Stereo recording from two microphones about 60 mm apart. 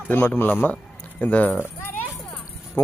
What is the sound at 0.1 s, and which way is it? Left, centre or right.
A man's voice, left.